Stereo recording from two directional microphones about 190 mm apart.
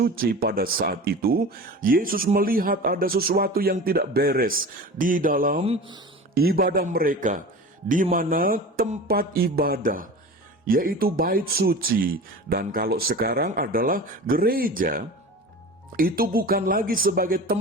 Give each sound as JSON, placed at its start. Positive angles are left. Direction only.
{"t": 0.0, "sound": "speech", "side_deg": -50}
{"t": 5.6, "sound": "mantra", "side_deg": -30}
{"t": 6.3, "sound": "speech", "side_deg": -55}